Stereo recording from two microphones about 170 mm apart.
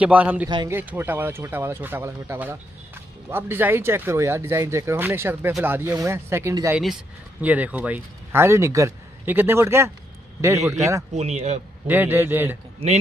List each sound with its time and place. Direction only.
0.0 s a man's voice: 10° right (ahead or behind)
11.1 s a man's voice: 40° right (ahead or behind)
11.9 s a man's voice: 10° right (ahead or behind)
12.8 s a man's voice: 35° right (ahead or behind)